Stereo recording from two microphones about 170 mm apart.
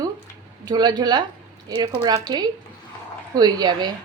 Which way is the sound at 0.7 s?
25° right (ahead or behind).